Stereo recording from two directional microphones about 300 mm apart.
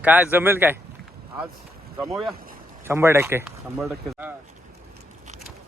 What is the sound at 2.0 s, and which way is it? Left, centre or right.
Speech, centre.